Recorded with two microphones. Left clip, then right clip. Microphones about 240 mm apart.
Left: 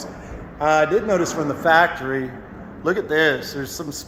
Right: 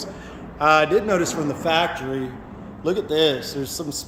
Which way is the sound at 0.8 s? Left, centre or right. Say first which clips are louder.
Left 1 dB; centre.